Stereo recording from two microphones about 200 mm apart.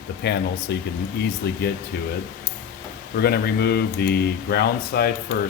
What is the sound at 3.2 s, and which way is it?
Speech, 50° left (ahead or behind).